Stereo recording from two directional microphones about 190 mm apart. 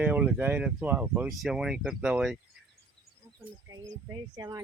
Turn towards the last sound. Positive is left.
turn(degrees=-15)  # may be behind; listen again after turning